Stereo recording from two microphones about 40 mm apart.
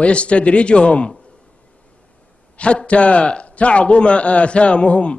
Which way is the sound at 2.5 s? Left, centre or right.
Left.